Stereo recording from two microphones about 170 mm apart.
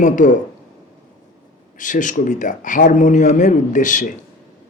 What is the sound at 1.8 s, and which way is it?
A man's voice, 50° left (ahead or behind).